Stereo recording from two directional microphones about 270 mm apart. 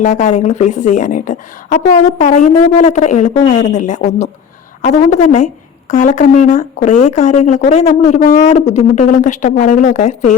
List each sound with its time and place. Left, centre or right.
0.0 s speech: left